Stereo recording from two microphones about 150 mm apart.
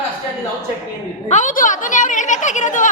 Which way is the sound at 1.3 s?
55° left (ahead or behind).